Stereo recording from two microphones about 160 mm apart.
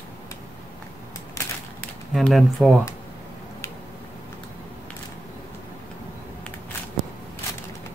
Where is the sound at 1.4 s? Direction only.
20° left (ahead or behind).